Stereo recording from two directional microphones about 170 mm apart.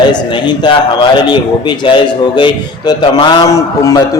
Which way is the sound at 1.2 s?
25° left (ahead or behind).